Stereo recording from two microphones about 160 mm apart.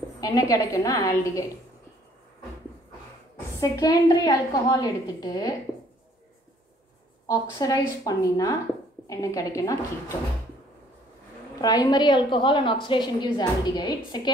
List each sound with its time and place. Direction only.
0.2 s a woman's voice: 20° left (ahead or behind)
3.6 s a woman's voice: 20° left (ahead or behind)
7.2 s a woman's voice: 25° left (ahead or behind)
11.6 s a woman's voice: 25° left (ahead or behind)